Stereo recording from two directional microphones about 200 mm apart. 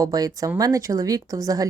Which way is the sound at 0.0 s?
20° right (ahead or behind).